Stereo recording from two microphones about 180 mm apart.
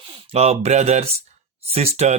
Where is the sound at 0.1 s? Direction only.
35° right (ahead or behind).